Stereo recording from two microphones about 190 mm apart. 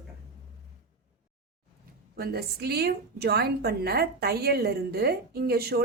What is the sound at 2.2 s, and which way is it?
A woman's voice, 55° right (ahead or behind).